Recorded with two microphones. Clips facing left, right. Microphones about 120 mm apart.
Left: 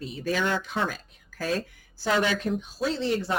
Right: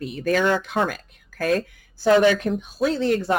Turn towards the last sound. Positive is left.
turn(degrees=-55)  # may be behind; listen again after turning